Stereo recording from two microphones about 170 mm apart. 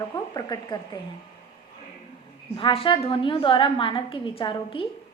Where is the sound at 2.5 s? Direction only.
30° left (ahead or behind).